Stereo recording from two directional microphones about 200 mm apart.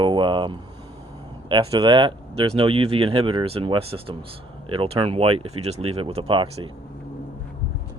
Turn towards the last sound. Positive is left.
turn(degrees=-25)  # may be behind; listen again after turning